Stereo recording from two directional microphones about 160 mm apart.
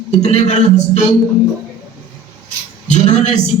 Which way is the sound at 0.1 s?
45° left (ahead or behind).